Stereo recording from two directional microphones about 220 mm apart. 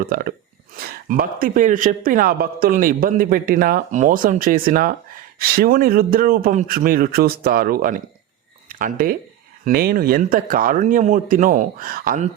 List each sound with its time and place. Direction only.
0.0 s a man's voice: 40° right (ahead or behind)